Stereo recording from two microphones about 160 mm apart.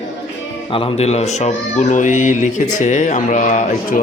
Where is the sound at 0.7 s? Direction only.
35° left (ahead or behind).